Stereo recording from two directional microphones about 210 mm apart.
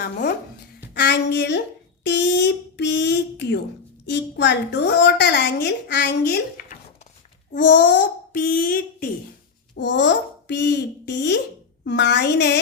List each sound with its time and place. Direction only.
0.0 s a woman's voice: 50° left (ahead or behind)
9.7 s a child's voice: 60° left (ahead or behind)